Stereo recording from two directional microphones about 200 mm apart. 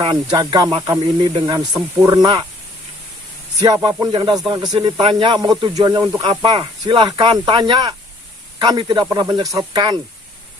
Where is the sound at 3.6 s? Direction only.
20° right (ahead or behind).